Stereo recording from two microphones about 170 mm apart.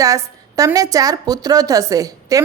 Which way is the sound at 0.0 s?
20° right (ahead or behind).